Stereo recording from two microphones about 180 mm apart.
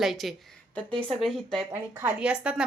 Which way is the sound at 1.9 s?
10° right (ahead or behind).